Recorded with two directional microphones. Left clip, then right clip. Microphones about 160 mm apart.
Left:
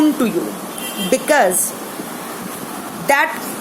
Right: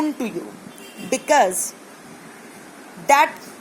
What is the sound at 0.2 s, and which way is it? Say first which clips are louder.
A woman's voice: left 9 dB; 20° right (ahead or behind).